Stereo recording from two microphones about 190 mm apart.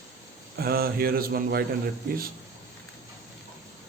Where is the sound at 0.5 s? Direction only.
50° right (ahead or behind).